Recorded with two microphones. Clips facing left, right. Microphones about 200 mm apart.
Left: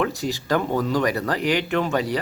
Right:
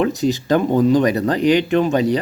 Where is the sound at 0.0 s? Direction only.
20° right (ahead or behind).